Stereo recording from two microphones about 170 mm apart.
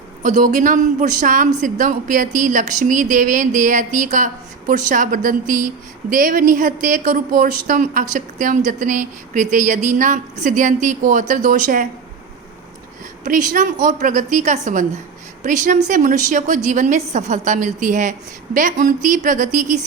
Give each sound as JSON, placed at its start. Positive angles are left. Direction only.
{"t": 0.2, "sound": "a woman's voice", "side_deg": -45}
{"t": 13.2, "sound": "a woman's voice", "side_deg": -50}